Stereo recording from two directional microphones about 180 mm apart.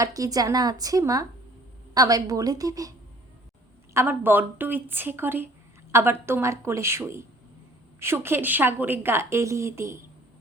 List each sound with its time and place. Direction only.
0.0 s a woman's voice: 20° right (ahead or behind)
3.9 s a woman's voice: 10° right (ahead or behind)